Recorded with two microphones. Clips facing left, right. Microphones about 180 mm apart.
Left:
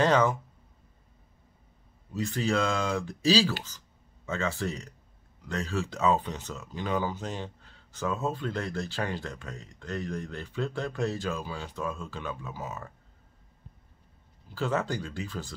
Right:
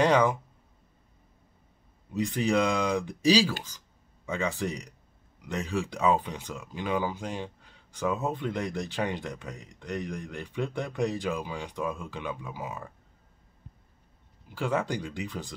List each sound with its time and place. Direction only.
0.0 s speech: 15° right (ahead or behind)
2.1 s speech: 15° right (ahead or behind)
14.5 s speech: 10° right (ahead or behind)